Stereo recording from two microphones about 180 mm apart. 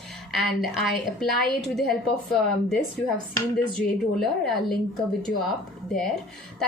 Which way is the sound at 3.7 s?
Centre (ahead or behind).